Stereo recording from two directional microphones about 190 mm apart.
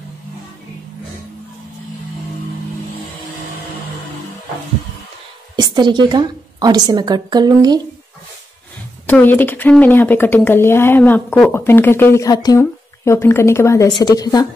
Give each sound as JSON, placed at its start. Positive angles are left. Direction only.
{"t": 5.6, "sound": "a woman's voice", "side_deg": -25}
{"t": 9.0, "sound": "a woman's voice", "side_deg": 10}